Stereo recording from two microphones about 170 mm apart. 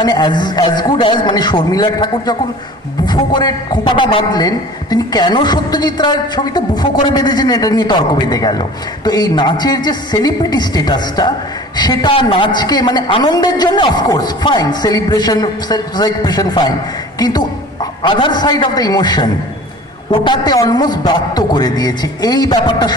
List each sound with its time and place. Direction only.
0.0 s speech: 25° left (ahead or behind)